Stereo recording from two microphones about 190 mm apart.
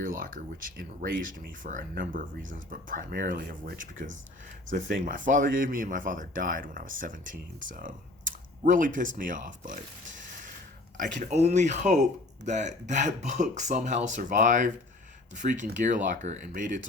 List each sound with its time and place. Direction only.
0.0 s speech: 45° right (ahead or behind)